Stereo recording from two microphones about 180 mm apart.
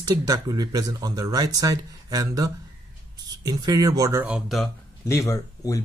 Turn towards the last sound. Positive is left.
turn(degrees=20)  # may be behind; listen again after turning